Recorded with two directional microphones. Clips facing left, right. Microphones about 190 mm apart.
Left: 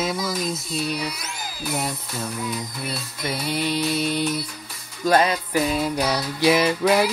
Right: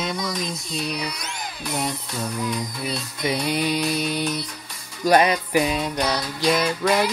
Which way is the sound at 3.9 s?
25° left (ahead or behind).